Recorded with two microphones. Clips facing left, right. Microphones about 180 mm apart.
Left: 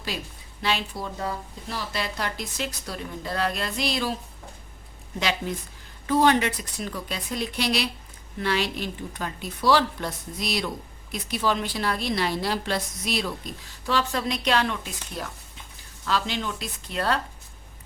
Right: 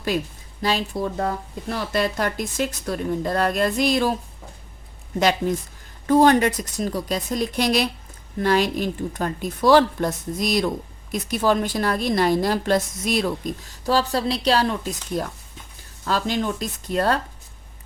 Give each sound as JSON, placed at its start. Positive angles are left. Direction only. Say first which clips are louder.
{"t": 0.6, "sound": "a woman's voice", "louder": "right 5 dB", "side_deg": -40}
{"t": 5.2, "sound": "a woman's voice", "louder": "right 8 dB", "side_deg": -45}